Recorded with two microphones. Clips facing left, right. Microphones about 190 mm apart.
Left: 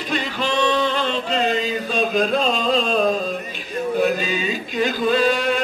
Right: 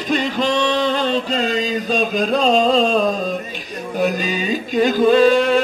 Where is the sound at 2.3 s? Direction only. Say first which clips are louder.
Right 5 dB; 40° right (ahead or behind).